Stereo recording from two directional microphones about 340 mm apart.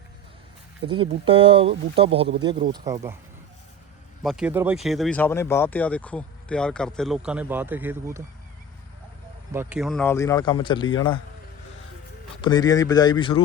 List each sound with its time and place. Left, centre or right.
0.9 s speech: centre
4.2 s speech: centre
9.5 s speech: centre
12.4 s speech: centre